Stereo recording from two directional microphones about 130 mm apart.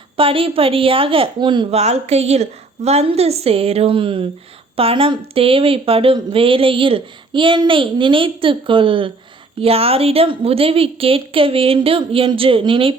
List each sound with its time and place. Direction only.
0.2 s speech: 45° right (ahead or behind)
1.7 s speech: 55° right (ahead or behind)